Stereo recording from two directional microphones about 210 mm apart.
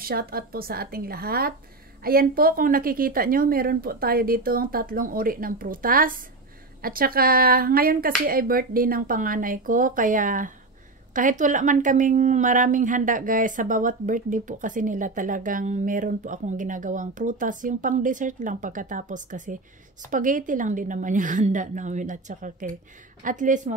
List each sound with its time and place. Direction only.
0.0 s speech: 45° right (ahead or behind)